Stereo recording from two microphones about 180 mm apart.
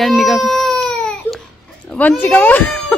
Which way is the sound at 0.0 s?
Centre (ahead or behind).